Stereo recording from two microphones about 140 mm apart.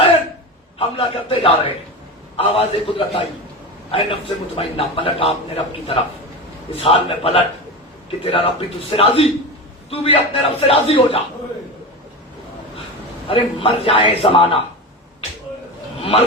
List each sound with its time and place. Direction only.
0.8 s a man's voice: 40° left (ahead or behind)
13.2 s a man's voice: 40° left (ahead or behind)
16.0 s a sound: 45° left (ahead or behind)